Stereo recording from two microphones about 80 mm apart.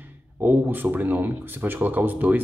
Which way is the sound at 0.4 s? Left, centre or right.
Right.